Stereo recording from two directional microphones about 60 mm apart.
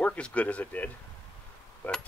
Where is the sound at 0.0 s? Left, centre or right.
Left.